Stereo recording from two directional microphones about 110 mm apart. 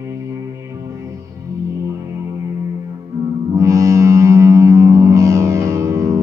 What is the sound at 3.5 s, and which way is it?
Music, 30° right (ahead or behind).